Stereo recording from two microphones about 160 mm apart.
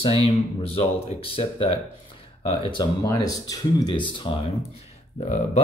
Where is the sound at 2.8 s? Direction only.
20° left (ahead or behind).